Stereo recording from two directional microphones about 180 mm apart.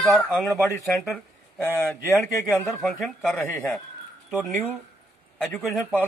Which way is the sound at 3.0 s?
5° left (ahead or behind).